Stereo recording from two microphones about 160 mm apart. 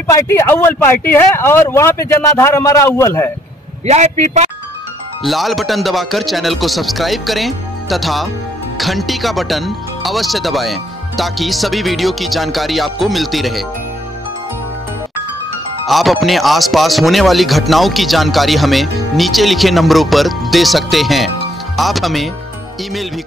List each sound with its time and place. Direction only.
0.0 s speech: 20° left (ahead or behind)
3.8 s a man's voice: 45° right (ahead or behind)
5.2 s speech: centre (ahead or behind)
15.9 s speech: centre (ahead or behind)